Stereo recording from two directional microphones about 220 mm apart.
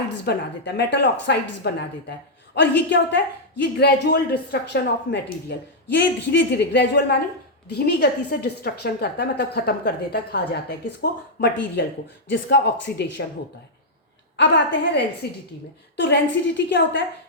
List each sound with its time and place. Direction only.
0.3 s a woman's voice: 50° left (ahead or behind)
14.3 s a woman's voice: 55° left (ahead or behind)